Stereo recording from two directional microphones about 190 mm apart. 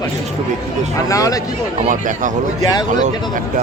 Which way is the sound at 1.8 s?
40° right (ahead or behind).